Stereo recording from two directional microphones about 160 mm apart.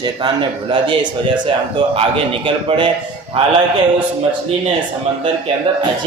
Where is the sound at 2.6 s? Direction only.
30° right (ahead or behind).